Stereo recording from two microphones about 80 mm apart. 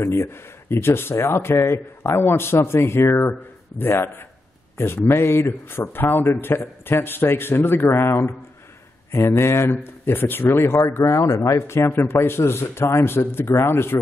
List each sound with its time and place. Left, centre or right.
0.0 s a man's voice: left